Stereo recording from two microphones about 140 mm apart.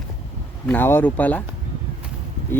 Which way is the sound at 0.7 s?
15° left (ahead or behind).